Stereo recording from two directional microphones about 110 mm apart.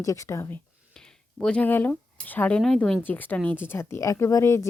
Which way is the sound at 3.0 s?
15° left (ahead or behind).